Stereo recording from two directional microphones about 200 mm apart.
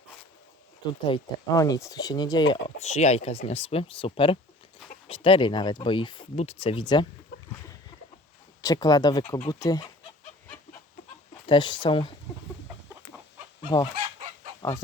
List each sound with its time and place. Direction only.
1.0 s speech: 20° left (ahead or behind)
8.6 s speech: 20° left (ahead or behind)
11.4 s speech: 25° left (ahead or behind)
14.6 s speech: 20° left (ahead or behind)